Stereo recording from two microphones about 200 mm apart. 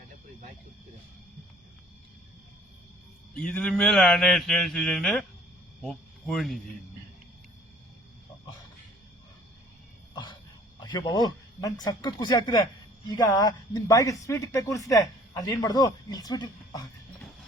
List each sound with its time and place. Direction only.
3.3 s speech: 5° left (ahead or behind)
10.8 s speech: 20° left (ahead or behind)